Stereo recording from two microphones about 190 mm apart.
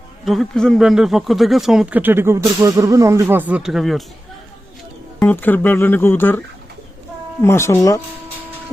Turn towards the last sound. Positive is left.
turn(degrees=15)  # may be behind; listen again after turning